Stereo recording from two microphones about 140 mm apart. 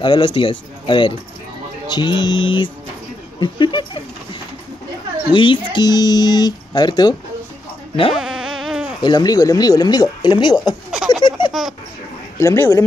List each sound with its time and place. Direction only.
0.0 s speech: 35° left (ahead or behind)
5.3 s speech: 35° left (ahead or behind)
8.2 s insect: 5° right (ahead or behind)
9.0 s speech: 30° left (ahead or behind)
11.1 s a sound: 35° left (ahead or behind)
12.4 s speech: 20° left (ahead or behind)